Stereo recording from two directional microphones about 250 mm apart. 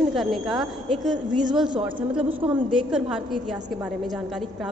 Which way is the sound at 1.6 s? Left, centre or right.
Centre.